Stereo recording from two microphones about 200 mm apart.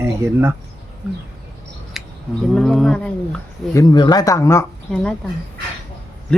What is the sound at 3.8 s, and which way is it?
Speech, 20° left (ahead or behind).